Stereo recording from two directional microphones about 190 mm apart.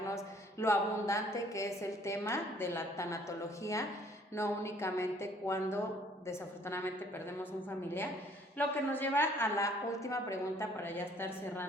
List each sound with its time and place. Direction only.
0.0 s a woman's voice: 15° left (ahead or behind)
8.5 s a woman's voice: 10° left (ahead or behind)